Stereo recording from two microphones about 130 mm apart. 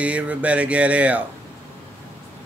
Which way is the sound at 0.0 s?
10° right (ahead or behind).